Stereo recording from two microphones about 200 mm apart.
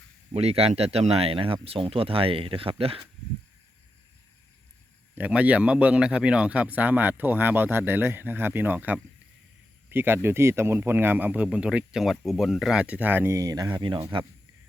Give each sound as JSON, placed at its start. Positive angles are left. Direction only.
{"t": 0.3, "sound": "speech", "side_deg": -30}
{"t": 5.1, "sound": "speech", "side_deg": -5}